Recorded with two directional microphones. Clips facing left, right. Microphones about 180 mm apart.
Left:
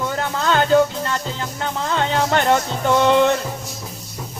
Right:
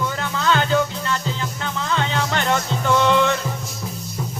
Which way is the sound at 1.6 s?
45° left (ahead or behind).